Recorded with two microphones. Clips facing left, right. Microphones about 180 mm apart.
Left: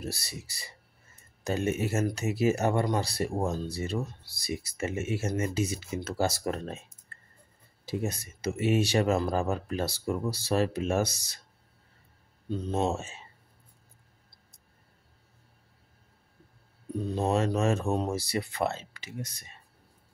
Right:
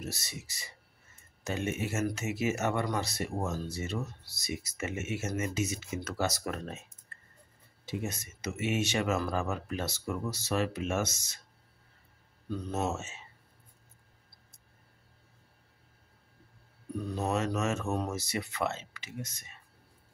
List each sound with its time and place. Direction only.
0.0 s speech: 35° left (ahead or behind)
7.8 s speech: 35° left (ahead or behind)
12.4 s speech: 25° left (ahead or behind)
16.9 s speech: 25° left (ahead or behind)